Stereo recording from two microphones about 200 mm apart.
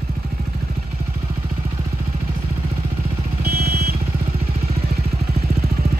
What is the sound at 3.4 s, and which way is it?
Vehicle, 50° right (ahead or behind).